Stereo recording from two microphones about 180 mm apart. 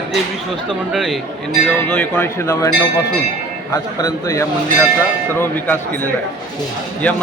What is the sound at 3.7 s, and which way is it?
A man's voice, 20° left (ahead or behind).